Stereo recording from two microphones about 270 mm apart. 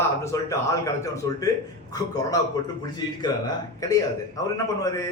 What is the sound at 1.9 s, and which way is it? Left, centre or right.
Speech, centre.